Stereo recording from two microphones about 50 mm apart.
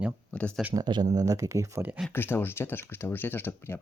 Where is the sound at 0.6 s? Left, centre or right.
Centre.